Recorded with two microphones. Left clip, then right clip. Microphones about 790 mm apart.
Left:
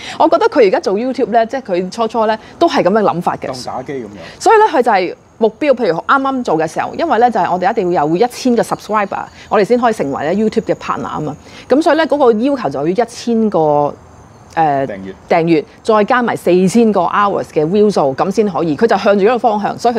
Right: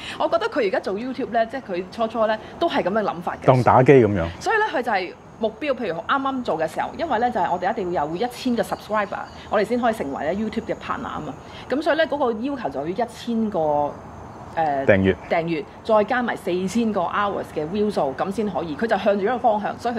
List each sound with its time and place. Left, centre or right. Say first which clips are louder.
0.2 s a woman's voice: left 12 dB; left
3.6 s speech: right 9 dB; right
4.4 s a woman's voice: left 14 dB; left